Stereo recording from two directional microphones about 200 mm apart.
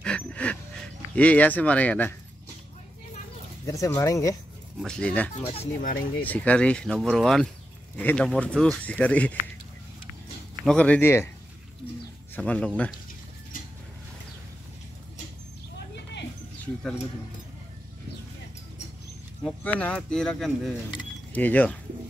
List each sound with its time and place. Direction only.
0.0 s a sound: 5° left (ahead or behind)
3.6 s speech: 15° left (ahead or behind)
4.8 s speech: 5° left (ahead or behind)
5.5 s speech: 30° left (ahead or behind)
6.2 s speech: 10° left (ahead or behind)
10.6 s speech: 5° left (ahead or behind)
12.4 s speech: 5° left (ahead or behind)
19.4 s speech: 5° left (ahead or behind)